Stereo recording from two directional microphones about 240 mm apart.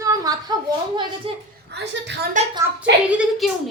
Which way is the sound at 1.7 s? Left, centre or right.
Right.